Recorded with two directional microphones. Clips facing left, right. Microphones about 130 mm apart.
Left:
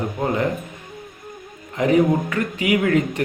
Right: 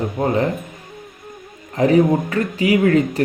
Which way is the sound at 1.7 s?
35° right (ahead or behind).